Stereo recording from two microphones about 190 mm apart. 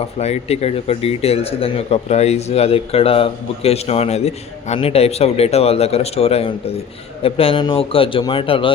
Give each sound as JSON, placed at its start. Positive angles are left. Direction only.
{"t": 0.2, "sound": "a man's voice", "side_deg": 35}